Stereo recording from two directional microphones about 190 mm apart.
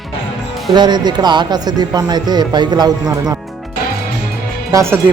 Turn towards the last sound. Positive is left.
turn(degrees=-15)  # may be behind; listen again after turning